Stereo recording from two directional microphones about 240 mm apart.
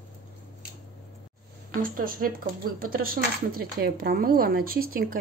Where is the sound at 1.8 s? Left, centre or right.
Right.